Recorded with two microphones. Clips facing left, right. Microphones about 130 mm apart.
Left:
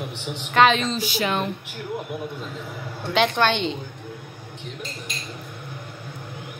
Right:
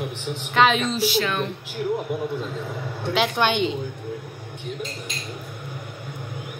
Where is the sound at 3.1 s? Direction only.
5° right (ahead or behind).